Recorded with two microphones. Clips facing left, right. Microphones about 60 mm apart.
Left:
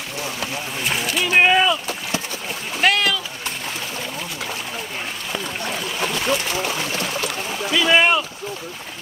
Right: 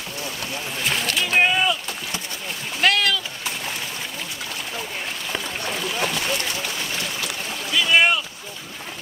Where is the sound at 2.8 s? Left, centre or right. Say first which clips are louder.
Left 1 dB; centre.